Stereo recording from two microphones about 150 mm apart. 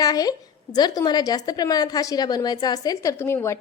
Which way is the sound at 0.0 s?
25° left (ahead or behind).